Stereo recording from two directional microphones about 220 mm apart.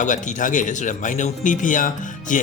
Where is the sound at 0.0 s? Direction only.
35° left (ahead or behind).